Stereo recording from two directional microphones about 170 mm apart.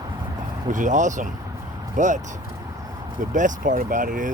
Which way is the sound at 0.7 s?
50° right (ahead or behind).